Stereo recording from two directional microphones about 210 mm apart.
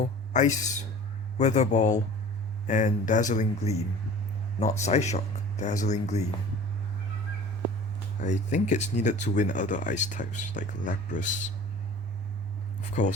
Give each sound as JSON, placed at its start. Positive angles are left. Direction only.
{"t": 0.0, "sound": "speech", "side_deg": 35}
{"t": 8.2, "sound": "speech", "side_deg": 35}
{"t": 12.9, "sound": "speech", "side_deg": 35}